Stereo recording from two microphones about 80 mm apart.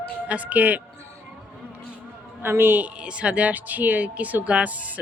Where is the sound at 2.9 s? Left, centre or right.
Centre.